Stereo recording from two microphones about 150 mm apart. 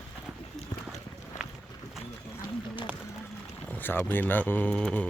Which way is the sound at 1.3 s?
55° left (ahead or behind).